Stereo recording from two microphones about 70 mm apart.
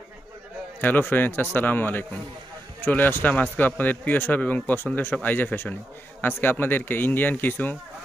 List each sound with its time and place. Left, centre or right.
0.7 s speech: left